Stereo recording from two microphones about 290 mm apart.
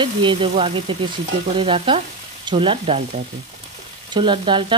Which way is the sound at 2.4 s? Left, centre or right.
Centre.